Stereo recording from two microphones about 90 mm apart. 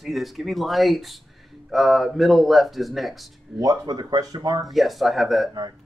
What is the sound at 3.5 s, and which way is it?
Speech, 45° right (ahead or behind).